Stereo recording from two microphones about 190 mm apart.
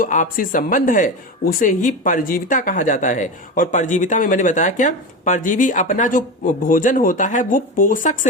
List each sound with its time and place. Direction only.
0.0 s speech: 45° left (ahead or behind)